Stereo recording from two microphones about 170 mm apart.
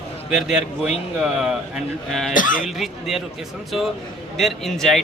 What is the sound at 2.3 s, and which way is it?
Speech, 50° left (ahead or behind).